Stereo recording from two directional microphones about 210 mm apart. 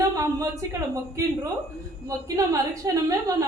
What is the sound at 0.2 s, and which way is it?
A woman's voice, 15° right (ahead or behind).